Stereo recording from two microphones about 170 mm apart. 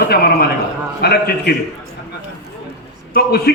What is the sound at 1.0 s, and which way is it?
Speech, 65° left (ahead or behind).